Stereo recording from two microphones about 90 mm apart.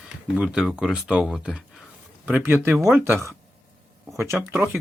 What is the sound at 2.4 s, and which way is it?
Speech, 25° right (ahead or behind).